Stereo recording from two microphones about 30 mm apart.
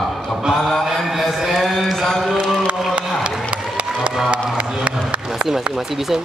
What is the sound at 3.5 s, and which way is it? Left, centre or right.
Run, right.